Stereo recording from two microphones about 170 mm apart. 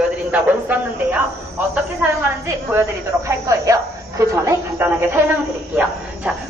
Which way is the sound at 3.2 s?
20° right (ahead or behind).